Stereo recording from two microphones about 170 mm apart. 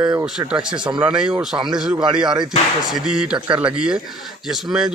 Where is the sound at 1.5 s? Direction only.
20° right (ahead or behind).